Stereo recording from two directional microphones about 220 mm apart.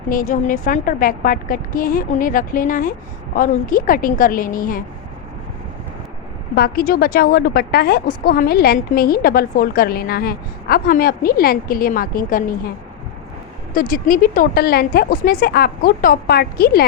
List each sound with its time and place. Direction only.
0.1 s a woman's voice: 40° left (ahead or behind)
6.6 s a woman's voice: 40° left (ahead or behind)
13.7 s a woman's voice: 40° left (ahead or behind)